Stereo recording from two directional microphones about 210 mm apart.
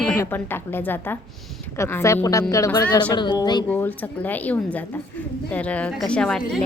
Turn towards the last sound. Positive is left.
turn(degrees=5)  # may be behind; listen again after turning